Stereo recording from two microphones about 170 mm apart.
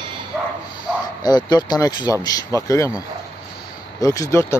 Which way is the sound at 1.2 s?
25° left (ahead or behind).